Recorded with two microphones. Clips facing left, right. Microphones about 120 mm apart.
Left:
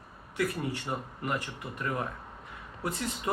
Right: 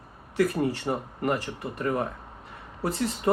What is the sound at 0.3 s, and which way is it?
Speech, 35° right (ahead or behind).